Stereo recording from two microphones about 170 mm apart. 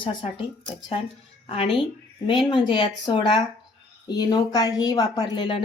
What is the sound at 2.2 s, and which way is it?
A woman's voice, 30° left (ahead or behind).